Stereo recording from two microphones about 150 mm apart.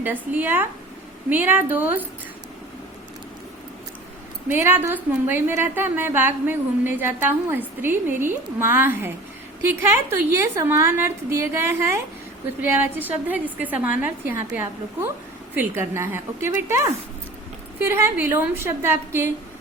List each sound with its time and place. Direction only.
0.0 s a woman's voice: 15° right (ahead or behind)
4.4 s a woman's voice: 15° right (ahead or behind)